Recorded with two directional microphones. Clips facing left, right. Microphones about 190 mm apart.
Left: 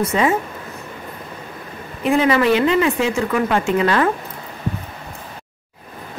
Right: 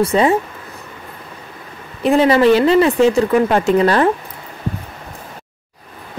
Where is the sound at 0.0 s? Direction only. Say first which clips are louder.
Right 4 dB; 35° right (ahead or behind).